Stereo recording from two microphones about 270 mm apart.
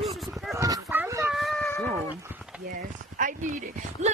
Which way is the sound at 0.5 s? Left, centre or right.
Centre.